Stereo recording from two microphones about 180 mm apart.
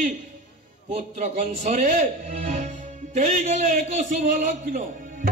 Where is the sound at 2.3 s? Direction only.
40° right (ahead or behind).